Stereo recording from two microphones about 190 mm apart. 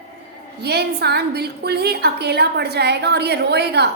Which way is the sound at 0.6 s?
60° right (ahead or behind).